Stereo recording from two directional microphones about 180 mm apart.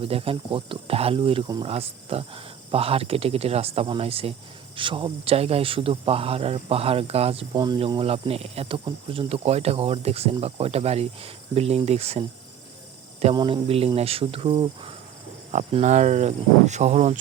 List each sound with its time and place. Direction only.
0.0 s speech: 30° right (ahead or behind)
7.6 s speech: 25° right (ahead or behind)
13.3 s speech: 30° right (ahead or behind)
15.5 s speech: 40° right (ahead or behind)